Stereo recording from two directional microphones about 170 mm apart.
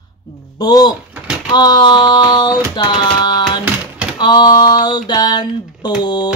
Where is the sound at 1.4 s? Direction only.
25° left (ahead or behind).